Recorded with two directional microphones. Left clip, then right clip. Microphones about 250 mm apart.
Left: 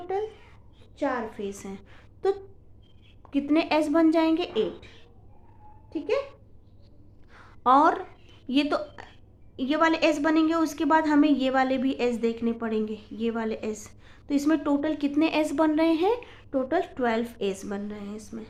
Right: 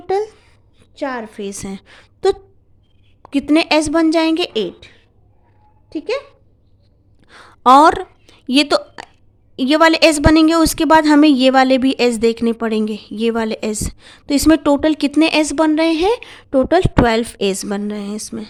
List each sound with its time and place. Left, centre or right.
0.1 s a woman's voice: right
5.9 s a woman's voice: right
7.3 s a sound: right
9.6 s a woman's voice: right